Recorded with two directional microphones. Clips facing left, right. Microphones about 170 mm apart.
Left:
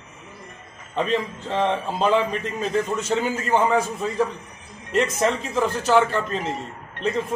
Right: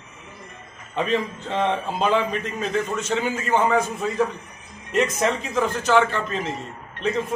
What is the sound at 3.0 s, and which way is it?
Speech, 35° left (ahead or behind).